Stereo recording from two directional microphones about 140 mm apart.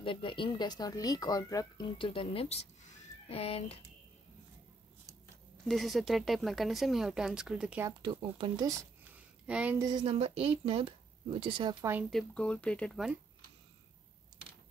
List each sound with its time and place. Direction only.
0.0 s speech: 40° left (ahead or behind)
2.0 s speech: 40° left (ahead or behind)
5.7 s speech: centre (ahead or behind)
8.0 s speech: 35° right (ahead or behind)
9.1 s a sound: 10° right (ahead or behind)
9.8 s speech: 30° right (ahead or behind)
10.0 s speech: 45° right (ahead or behind)
11.8 s speech: 15° right (ahead or behind)
12.1 s speech: 5° left (ahead or behind)